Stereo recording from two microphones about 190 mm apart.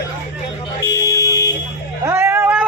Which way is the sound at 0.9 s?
15° left (ahead or behind).